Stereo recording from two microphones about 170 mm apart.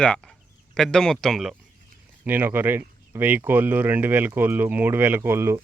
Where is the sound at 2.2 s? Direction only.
10° right (ahead or behind).